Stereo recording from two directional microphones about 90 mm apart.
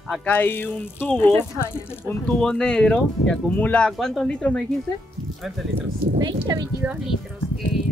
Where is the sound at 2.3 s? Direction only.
5° left (ahead or behind).